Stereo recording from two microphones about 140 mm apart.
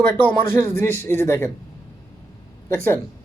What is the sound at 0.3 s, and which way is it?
Speech, 15° left (ahead or behind).